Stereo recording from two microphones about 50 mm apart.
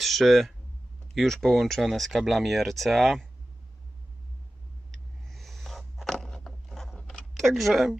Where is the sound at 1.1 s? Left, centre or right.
Centre.